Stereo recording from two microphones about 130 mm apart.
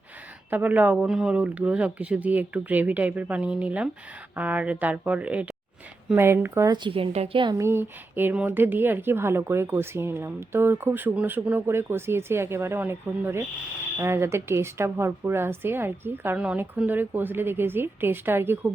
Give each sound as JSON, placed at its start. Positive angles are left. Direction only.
{"t": 0.5, "sound": "a woman's voice", "side_deg": -15}
{"t": 6.7, "sound": "a woman's voice", "side_deg": -40}
{"t": 7.6, "sound": "a woman's voice", "side_deg": -15}